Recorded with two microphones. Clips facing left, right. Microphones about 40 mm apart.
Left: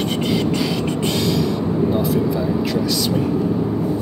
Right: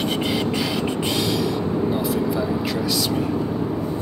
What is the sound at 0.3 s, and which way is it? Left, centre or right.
Vehicle, centre.